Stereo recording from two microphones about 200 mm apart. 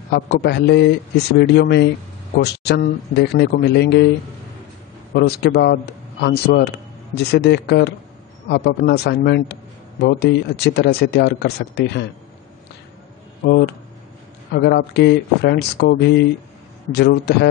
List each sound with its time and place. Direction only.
0.1 s a man's voice: 55° left (ahead or behind)
5.1 s a man's voice: 55° left (ahead or behind)
13.4 s a man's voice: 55° left (ahead or behind)